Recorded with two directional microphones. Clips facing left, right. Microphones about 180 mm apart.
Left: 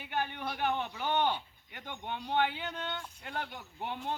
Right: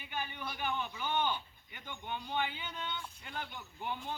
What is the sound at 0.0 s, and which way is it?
A man's voice, 75° left (ahead or behind).